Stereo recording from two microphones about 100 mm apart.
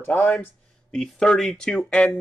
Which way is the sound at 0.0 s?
25° left (ahead or behind).